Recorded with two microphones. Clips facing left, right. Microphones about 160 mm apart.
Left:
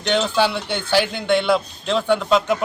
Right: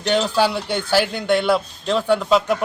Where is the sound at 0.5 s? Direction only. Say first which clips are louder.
Right 2 dB; 40° right (ahead or behind).